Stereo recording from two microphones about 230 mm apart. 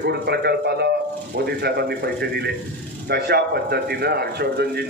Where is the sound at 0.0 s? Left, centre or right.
Right.